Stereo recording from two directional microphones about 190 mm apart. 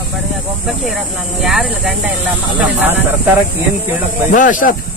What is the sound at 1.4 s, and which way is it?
Speech, centre (ahead or behind).